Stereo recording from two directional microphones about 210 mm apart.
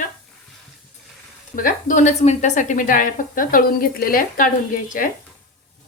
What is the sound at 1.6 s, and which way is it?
A woman's voice, 40° left (ahead or behind).